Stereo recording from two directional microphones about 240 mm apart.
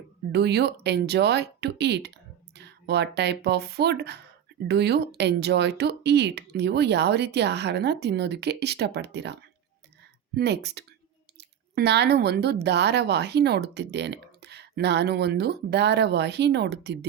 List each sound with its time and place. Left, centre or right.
0.3 s speech: right